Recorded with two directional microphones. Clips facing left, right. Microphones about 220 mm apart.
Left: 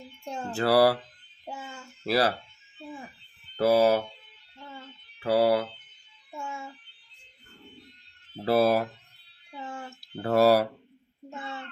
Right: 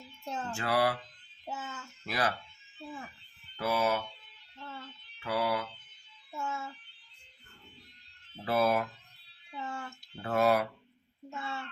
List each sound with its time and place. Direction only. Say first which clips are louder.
0.3 s speech: left 3 dB; 15° left (ahead or behind)
0.5 s speech: left 9 dB; 35° left (ahead or behind)
1.5 s child singing: left 1 dB; 10° left (ahead or behind)
2.0 s speech: left 8 dB; 35° left (ahead or behind)
3.6 s speech: left 9 dB; 35° left (ahead or behind)
4.5 s a sound: left 1 dB; 15° left (ahead or behind)
5.2 s speech: left 9 dB; 35° left (ahead or behind)
6.3 s music: even; 15° left (ahead or behind)
8.4 s speech: left 6 dB; 35° left (ahead or behind)
9.6 s a sound: left 2 dB; 15° left (ahead or behind)
10.0 s speech: left 7 dB; 35° left (ahead or behind)
11.3 s a sound: left 1 dB; 15° left (ahead or behind)